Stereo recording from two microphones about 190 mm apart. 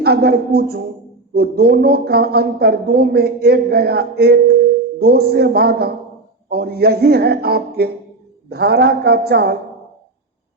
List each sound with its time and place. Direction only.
0.0 s speech: 55° right (ahead or behind)